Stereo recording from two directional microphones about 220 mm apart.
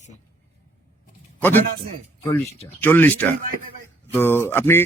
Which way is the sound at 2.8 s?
10° left (ahead or behind).